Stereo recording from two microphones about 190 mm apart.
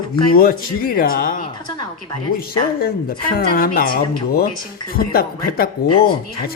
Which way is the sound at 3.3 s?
50° left (ahead or behind).